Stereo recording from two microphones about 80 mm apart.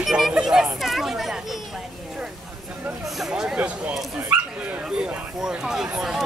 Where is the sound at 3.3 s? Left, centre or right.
Centre.